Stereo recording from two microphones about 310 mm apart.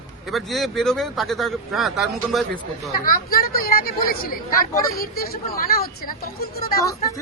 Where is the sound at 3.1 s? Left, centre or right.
Left.